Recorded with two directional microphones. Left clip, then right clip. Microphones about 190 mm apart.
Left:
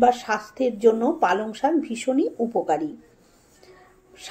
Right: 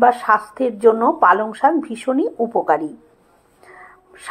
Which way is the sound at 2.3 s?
20° right (ahead or behind).